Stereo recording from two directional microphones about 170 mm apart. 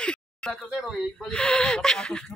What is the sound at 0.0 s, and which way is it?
Speech, 5° left (ahead or behind).